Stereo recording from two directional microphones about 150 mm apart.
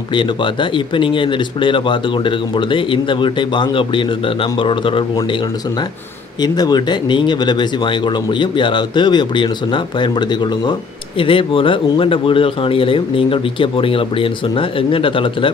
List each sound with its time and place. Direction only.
0.1 s speech: 35° left (ahead or behind)